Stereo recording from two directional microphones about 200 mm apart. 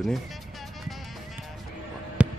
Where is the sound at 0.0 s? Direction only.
Centre (ahead or behind).